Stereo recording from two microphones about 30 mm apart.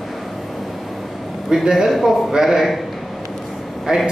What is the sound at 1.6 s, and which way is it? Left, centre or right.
Speech, right.